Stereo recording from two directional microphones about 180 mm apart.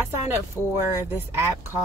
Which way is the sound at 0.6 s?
15° right (ahead or behind).